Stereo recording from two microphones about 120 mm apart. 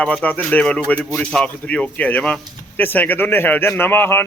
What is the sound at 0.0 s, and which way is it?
Speech, 10° left (ahead or behind).